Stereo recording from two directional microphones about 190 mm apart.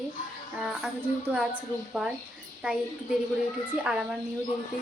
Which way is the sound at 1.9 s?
5° right (ahead or behind).